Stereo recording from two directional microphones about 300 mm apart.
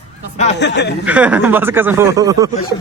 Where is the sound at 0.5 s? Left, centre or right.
Left.